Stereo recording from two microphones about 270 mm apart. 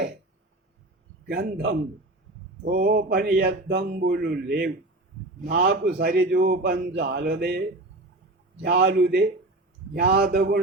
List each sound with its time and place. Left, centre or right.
1.3 s a man's voice: right
5.5 s a man's voice: right
8.6 s a man's voice: right